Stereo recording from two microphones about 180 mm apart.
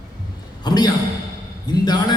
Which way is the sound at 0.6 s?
20° left (ahead or behind).